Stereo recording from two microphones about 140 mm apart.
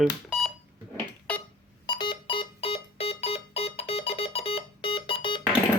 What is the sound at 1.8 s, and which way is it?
Keyboard, 30° left (ahead or behind).